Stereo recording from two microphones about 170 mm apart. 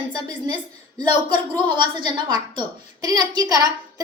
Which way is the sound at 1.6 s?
25° right (ahead or behind).